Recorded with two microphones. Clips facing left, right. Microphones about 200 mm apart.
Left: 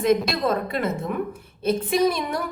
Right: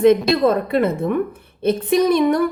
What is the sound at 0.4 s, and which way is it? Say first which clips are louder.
A woman's voice: right 7 dB; 60° right (ahead or behind).